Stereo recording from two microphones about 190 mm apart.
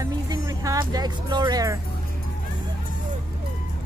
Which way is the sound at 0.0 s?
20° right (ahead or behind).